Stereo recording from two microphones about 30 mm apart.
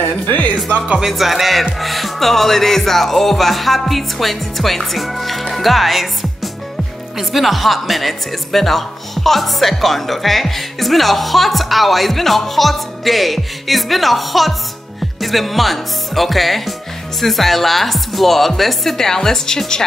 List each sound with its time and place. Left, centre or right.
0.9 s speech: centre
18.9 s a woman's voice: centre